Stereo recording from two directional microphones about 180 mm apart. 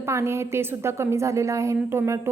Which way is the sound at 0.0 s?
15° right (ahead or behind).